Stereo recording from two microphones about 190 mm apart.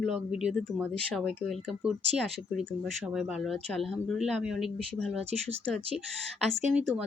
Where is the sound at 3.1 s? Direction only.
5° right (ahead or behind).